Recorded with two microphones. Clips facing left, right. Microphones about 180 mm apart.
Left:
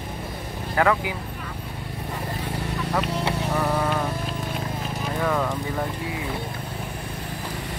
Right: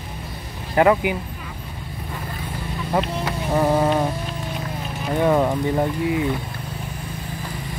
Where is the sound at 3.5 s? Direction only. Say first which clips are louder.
Right 8 dB; 30° right (ahead or behind).